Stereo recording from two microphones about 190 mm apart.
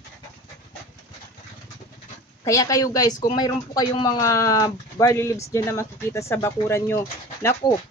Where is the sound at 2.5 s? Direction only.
15° left (ahead or behind).